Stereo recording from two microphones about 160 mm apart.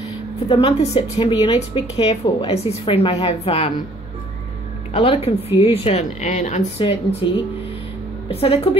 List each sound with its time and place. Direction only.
0.5 s a woman's voice: 35° left (ahead or behind)
5.0 s a woman's voice: 35° left (ahead or behind)
7.2 s a woman's voice: 30° left (ahead or behind)